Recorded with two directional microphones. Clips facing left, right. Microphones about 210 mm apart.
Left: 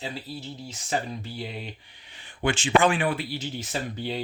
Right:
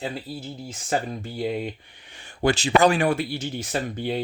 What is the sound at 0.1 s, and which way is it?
Speech, 50° right (ahead or behind).